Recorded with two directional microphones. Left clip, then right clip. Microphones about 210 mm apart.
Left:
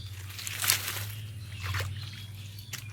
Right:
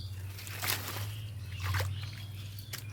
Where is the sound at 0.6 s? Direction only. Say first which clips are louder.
Left 6 dB; 5° right (ahead or behind).